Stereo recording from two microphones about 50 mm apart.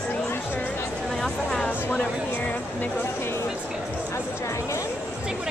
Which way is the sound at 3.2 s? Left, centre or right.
Left.